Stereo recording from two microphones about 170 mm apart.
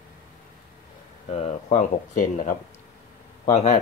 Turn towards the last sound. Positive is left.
turn(degrees=45)  # may be behind; listen again after turning